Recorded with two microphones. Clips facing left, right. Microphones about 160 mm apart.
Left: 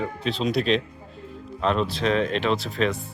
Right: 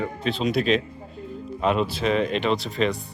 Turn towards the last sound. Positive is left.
turn(degrees=0)  # may be behind; listen again after turning